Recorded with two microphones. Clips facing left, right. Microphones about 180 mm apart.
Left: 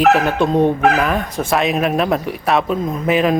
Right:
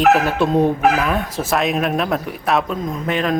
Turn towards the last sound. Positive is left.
turn(degrees=5)  # may be behind; listen again after turning